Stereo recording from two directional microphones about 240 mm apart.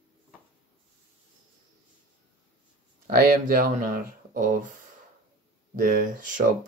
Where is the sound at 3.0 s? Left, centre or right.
Right.